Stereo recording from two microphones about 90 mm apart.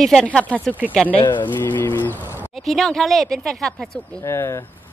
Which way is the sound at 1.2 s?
60° left (ahead or behind).